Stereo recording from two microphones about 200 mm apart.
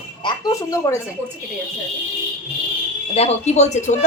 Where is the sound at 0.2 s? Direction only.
20° left (ahead or behind).